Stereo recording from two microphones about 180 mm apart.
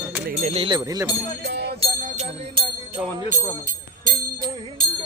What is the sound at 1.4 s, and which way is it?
Music, 65° right (ahead or behind).